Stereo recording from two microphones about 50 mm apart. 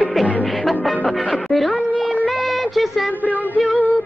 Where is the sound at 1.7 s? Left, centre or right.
Left.